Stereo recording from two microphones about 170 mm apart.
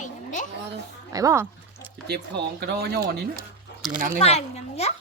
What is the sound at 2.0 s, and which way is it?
Speech, 70° right (ahead or behind).